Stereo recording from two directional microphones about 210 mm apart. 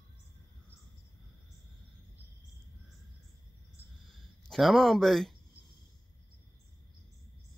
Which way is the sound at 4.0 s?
Centre (ahead or behind).